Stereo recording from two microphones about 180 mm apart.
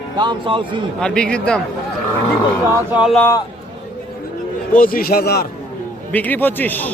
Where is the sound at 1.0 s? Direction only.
5° left (ahead or behind).